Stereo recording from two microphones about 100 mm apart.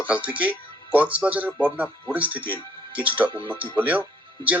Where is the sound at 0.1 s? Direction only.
15° right (ahead or behind).